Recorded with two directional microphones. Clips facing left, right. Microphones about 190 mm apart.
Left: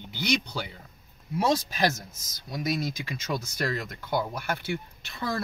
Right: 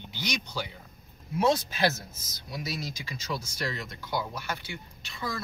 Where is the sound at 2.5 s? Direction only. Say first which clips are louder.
Left 6 dB; 50° left (ahead or behind).